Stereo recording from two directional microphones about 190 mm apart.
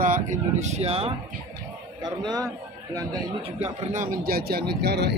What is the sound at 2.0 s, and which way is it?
Speech, 20° right (ahead or behind).